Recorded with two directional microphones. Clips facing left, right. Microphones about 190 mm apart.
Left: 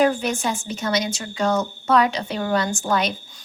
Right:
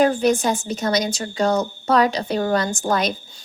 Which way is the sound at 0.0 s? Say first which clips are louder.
Right 3 dB; 35° right (ahead or behind).